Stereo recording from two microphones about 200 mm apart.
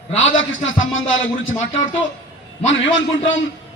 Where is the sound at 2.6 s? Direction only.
70° left (ahead or behind).